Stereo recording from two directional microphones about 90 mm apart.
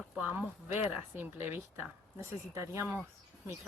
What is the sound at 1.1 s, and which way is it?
A woman's voice, 25° right (ahead or behind).